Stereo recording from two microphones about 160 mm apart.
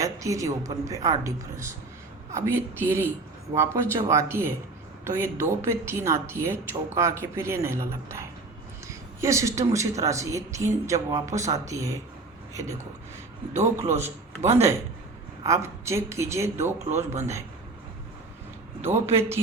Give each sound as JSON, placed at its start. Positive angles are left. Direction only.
{"t": 0.0, "sound": "a woman's voice", "side_deg": -20}
{"t": 18.8, "sound": "a man's voice", "side_deg": -15}